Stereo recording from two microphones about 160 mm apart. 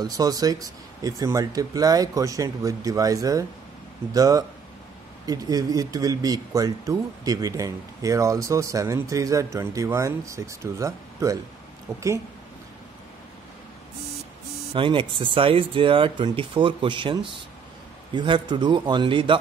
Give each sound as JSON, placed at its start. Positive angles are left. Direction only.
{"t": 0.0, "sound": "speech", "side_deg": -20}
{"t": 14.7, "sound": "speech", "side_deg": -30}